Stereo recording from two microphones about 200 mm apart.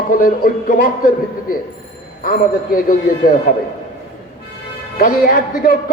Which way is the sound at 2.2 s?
45° left (ahead or behind).